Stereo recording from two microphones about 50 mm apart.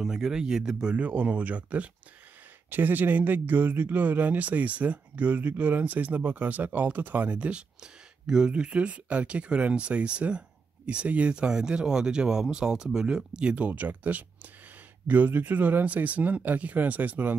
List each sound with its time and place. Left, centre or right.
0.0 s speech: centre
0.9 s speech: right
7.3 s speech: right
13.7 s speech: right